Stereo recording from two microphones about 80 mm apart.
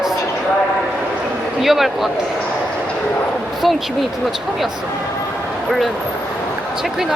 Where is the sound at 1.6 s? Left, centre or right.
Centre.